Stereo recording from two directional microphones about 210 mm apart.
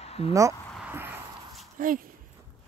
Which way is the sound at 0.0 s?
30° left (ahead or behind).